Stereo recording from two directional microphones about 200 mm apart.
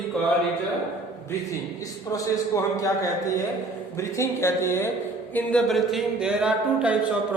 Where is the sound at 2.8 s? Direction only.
15° left (ahead or behind).